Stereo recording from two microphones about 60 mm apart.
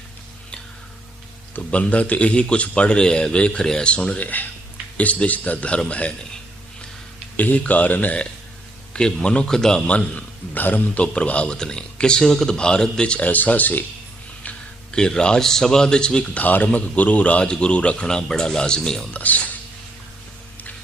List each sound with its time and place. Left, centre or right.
1.5 s a man's voice: left
7.3 s a man's voice: left
8.9 s a man's voice: centre
13.2 s a man's voice: left
14.9 s a man's voice: centre
16.4 s a man's voice: left; by 19.0 s centre
19.1 s a man's voice: left